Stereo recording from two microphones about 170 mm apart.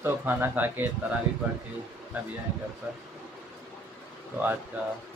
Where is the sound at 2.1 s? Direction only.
10° right (ahead or behind).